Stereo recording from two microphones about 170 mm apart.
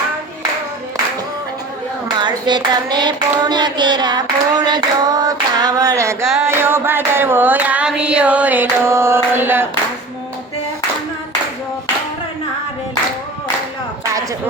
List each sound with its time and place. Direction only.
2.1 s hands: 25° right (ahead or behind)
6.4 s child singing: 15° right (ahead or behind)